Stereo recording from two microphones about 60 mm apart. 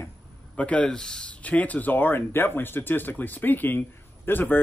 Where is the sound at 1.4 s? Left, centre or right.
Left.